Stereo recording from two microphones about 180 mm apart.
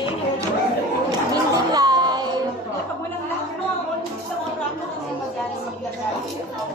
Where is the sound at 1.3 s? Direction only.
20° right (ahead or behind).